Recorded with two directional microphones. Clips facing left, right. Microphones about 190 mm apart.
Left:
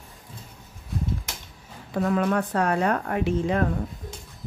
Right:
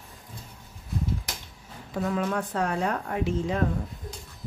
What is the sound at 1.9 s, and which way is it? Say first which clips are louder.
Speech: left 4 dB; 65° left (ahead or behind).